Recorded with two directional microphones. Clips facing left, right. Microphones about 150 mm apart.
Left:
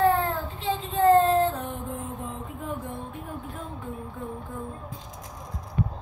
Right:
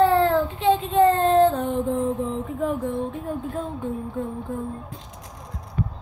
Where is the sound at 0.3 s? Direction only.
70° right (ahead or behind).